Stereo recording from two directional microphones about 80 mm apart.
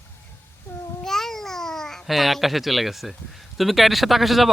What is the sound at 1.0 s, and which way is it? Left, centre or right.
Babbling, centre.